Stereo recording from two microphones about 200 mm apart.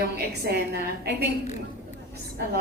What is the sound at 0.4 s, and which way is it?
Speech, 55° right (ahead or behind).